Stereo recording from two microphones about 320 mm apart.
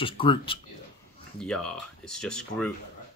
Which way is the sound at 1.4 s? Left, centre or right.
Centre.